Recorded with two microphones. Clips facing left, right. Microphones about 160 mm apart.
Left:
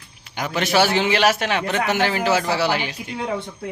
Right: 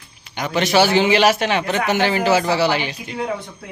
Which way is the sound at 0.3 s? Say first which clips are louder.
Right 3 dB; 5° left (ahead or behind).